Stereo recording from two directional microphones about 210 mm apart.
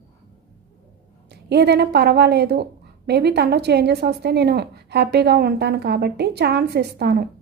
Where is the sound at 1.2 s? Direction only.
50° right (ahead or behind).